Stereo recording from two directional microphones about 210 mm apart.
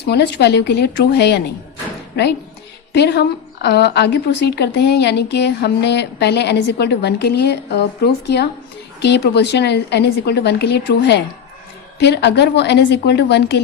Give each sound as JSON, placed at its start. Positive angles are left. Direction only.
{"t": 0.0, "sound": "a woman's voice", "side_deg": 55}
{"t": 2.9, "sound": "a woman's voice", "side_deg": 55}